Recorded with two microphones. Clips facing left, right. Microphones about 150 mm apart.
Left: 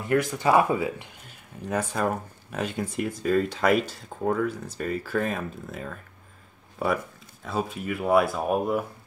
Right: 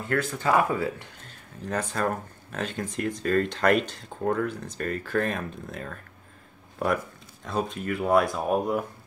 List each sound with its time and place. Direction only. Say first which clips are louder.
0.1 s speech: left 3 dB; 15° left (ahead or behind)